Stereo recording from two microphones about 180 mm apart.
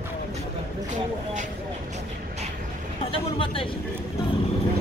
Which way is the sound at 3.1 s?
30° left (ahead or behind).